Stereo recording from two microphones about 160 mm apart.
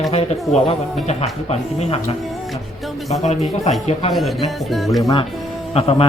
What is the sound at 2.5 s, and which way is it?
Music, centre (ahead or behind).